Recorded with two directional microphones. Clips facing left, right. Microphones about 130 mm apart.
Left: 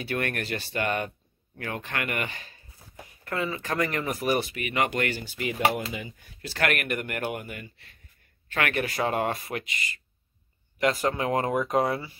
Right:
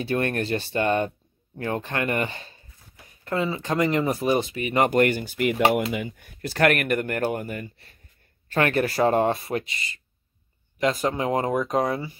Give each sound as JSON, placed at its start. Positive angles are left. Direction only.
{"t": 0.0, "sound": "speech", "side_deg": -30}
{"t": 4.8, "sound": "speech", "side_deg": -45}
{"t": 10.8, "sound": "speech", "side_deg": -20}